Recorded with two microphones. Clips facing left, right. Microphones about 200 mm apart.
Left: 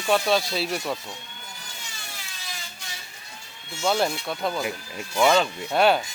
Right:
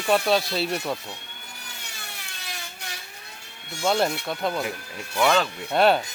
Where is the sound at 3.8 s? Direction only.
Centre (ahead or behind).